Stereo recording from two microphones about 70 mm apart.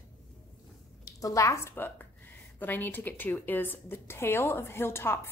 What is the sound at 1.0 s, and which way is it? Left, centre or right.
A woman's voice, left.